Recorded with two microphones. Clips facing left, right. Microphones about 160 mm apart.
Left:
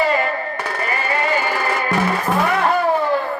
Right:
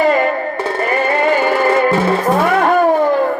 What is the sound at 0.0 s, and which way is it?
Music, 40° right (ahead or behind).